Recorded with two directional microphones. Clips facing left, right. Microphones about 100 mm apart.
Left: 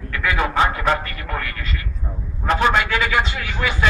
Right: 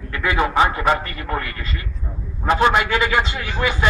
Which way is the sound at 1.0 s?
25° right (ahead or behind).